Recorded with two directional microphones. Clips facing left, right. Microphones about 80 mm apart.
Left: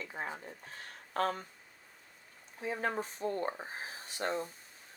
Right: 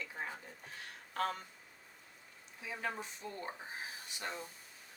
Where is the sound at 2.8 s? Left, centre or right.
Left.